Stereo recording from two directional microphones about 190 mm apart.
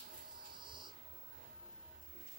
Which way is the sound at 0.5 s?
25° right (ahead or behind).